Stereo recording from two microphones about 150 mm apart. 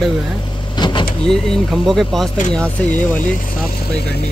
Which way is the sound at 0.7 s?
30° left (ahead or behind).